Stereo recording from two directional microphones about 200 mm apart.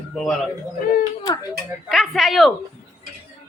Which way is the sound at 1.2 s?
15° left (ahead or behind).